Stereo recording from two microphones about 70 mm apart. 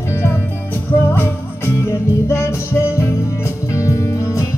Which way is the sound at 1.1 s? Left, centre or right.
Left.